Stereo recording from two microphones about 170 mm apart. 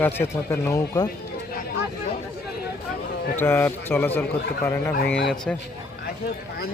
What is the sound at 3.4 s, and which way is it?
Speech, 10° left (ahead or behind).